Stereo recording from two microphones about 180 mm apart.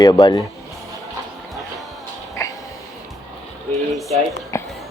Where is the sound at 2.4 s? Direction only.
20° left (ahead or behind).